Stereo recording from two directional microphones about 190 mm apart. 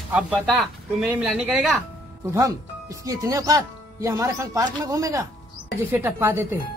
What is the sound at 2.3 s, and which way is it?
Speech, 15° right (ahead or behind).